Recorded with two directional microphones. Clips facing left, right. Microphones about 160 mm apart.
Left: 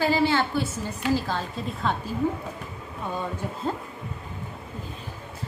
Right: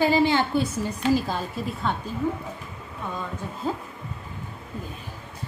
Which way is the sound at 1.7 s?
Centre (ahead or behind).